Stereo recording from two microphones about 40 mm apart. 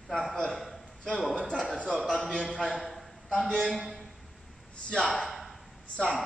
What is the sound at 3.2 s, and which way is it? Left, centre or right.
Speech, centre.